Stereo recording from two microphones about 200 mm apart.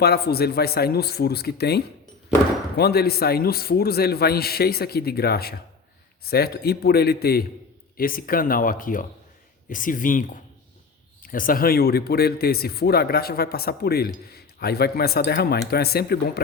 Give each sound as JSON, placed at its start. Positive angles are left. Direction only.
{"t": 0.0, "sound": "speech", "side_deg": 50}